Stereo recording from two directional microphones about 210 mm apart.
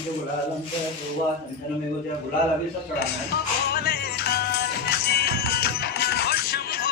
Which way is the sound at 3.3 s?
50° left (ahead or behind).